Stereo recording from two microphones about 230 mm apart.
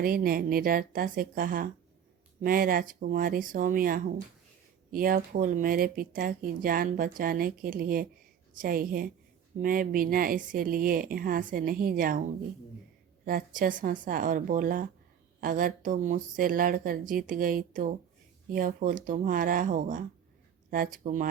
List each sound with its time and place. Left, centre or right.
0.0 s speech: right
13.2 s speech: right